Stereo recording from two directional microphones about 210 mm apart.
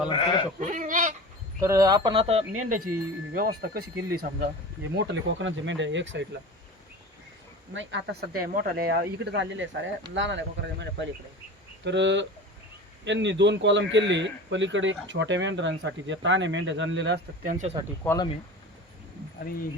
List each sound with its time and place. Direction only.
0.1 s speech: 20° left (ahead or behind)
0.6 s goat: 40° right (ahead or behind)
1.6 s speech: 15° right (ahead or behind)
2.6 s speech: 40° right (ahead or behind)
4.9 s a man's voice: 60° right (ahead or behind)
7.7 s a man's voice: 60° right (ahead or behind)
17.5 s speech: 35° right (ahead or behind)
18.0 s speech: 10° left (ahead or behind)